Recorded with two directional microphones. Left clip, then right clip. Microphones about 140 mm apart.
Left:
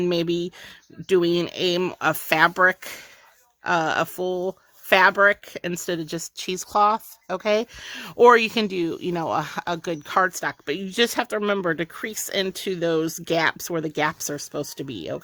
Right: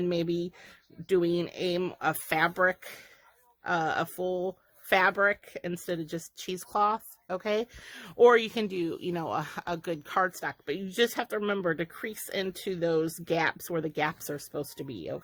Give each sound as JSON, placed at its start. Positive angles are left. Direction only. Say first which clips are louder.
{"t": 0.0, "sound": "speech", "louder": "left 6 dB", "side_deg": 30}